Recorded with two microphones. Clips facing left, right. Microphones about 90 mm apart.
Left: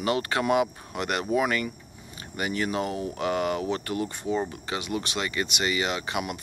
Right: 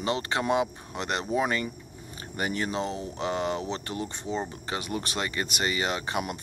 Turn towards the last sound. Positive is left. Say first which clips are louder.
# even
turn(degrees=-35)  # may be behind; listen again after turning